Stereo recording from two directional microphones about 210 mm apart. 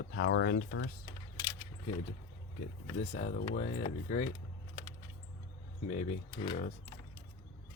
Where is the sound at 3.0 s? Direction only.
30° left (ahead or behind).